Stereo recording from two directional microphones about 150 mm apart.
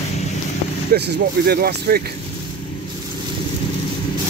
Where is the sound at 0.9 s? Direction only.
90° right.